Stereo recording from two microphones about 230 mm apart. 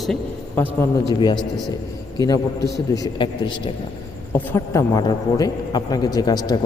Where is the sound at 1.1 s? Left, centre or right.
Centre.